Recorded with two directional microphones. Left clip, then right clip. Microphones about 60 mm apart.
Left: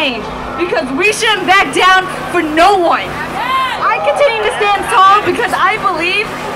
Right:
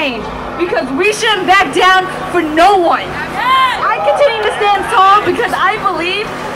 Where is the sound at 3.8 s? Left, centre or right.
Left.